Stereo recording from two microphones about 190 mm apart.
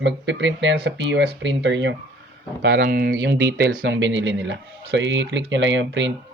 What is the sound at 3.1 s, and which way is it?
Speech, 70° right (ahead or behind).